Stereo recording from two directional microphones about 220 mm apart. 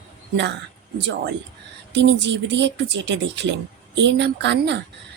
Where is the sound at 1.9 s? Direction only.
50° right (ahead or behind).